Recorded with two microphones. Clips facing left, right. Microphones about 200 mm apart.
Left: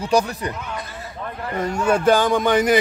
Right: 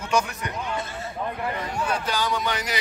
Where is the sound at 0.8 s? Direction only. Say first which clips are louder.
Right 2 dB; 25° right (ahead or behind).